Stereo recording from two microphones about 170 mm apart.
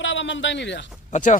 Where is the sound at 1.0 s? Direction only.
45° left (ahead or behind).